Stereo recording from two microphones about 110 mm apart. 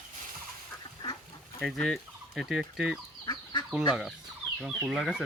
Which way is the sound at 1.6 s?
5° left (ahead or behind).